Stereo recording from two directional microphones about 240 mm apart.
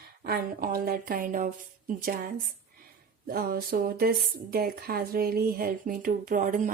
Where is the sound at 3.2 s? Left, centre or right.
Right.